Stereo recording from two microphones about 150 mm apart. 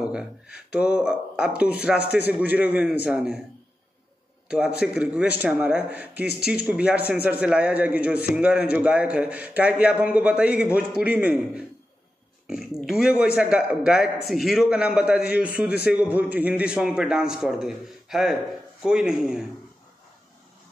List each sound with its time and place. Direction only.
0.7 s a man's voice: 5° right (ahead or behind)
4.5 s a man's voice: 5° right (ahead or behind)